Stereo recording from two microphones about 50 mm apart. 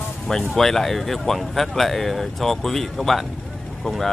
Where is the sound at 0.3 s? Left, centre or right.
Centre.